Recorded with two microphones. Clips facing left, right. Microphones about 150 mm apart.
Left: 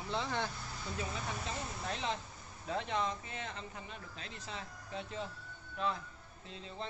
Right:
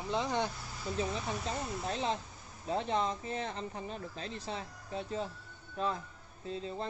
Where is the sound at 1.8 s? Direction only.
35° right (ahead or behind).